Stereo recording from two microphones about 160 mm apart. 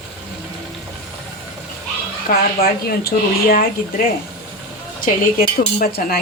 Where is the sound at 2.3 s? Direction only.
70° left (ahead or behind).